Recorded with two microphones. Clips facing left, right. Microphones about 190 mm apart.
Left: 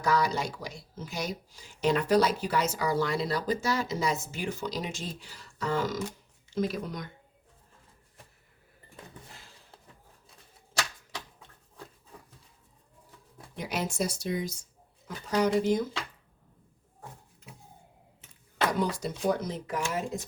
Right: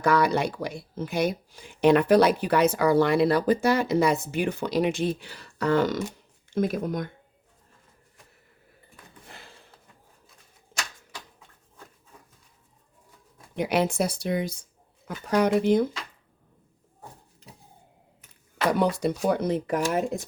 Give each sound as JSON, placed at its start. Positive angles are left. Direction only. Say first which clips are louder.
{"t": 0.0, "sound": "speech", "louder": "right 5 dB", "side_deg": -60}
{"t": 6.5, "sound": "speech", "louder": "right 5 dB", "side_deg": -50}
{"t": 9.3, "sound": "a sound", "louder": "right 5 dB", "side_deg": -65}
{"t": 13.6, "sound": "speech", "louder": "right 7 dB", "side_deg": -60}
{"t": 18.8, "sound": "speech", "louder": "right 6 dB", "side_deg": -60}